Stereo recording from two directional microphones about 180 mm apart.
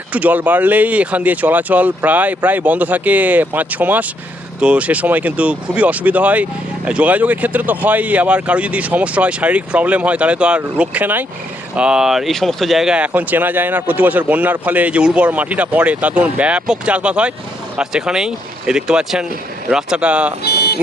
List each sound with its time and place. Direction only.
0.1 s speech: 10° right (ahead or behind)
20.4 s vehicle: 60° left (ahead or behind)